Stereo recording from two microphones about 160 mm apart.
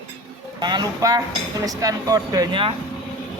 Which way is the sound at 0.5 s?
25° right (ahead or behind).